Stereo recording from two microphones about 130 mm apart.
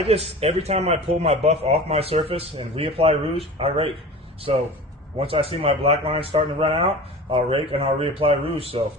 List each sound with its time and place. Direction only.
0.0 s a man's voice: 50° right (ahead or behind)